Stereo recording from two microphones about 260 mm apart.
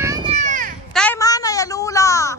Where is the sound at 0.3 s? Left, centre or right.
Right.